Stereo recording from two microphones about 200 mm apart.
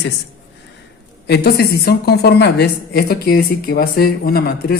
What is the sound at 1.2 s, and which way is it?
A man's voice, 55° left (ahead or behind).